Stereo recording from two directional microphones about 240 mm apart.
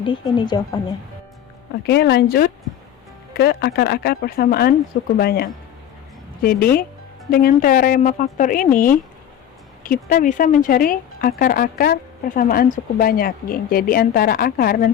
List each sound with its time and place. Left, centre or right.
0.0 s speech: centre
1.9 s a woman's voice: left